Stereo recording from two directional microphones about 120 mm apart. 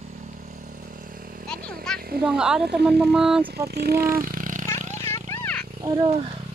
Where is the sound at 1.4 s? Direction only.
5° left (ahead or behind).